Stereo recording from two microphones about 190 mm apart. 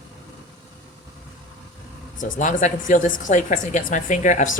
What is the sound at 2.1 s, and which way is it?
A woman's voice, 40° left (ahead or behind).